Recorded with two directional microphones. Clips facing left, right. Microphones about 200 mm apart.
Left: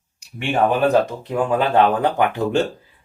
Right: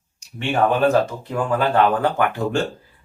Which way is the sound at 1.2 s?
20° left (ahead or behind).